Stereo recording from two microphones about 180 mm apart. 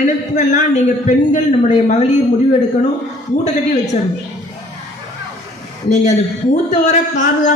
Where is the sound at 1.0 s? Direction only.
40° left (ahead or behind).